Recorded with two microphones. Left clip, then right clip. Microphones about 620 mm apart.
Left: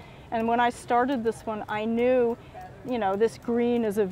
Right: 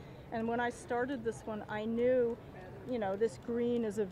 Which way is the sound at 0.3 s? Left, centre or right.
Left.